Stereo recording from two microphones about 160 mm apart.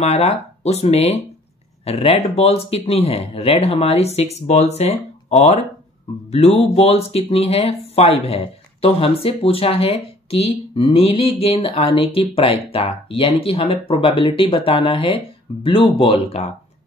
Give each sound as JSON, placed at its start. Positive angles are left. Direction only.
{"t": 0.0, "sound": "speech", "side_deg": 40}
{"t": 6.6, "sound": "speech", "side_deg": 40}